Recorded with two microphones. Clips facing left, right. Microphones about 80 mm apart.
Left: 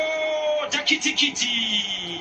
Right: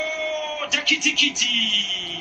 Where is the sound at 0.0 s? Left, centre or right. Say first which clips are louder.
Left 3 dB; left.